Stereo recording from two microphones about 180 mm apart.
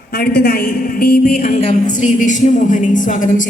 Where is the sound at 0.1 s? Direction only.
60° left (ahead or behind).